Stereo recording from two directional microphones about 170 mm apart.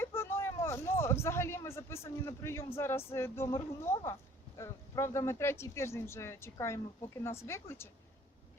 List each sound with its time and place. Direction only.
0.0 s speech: 15° left (ahead or behind)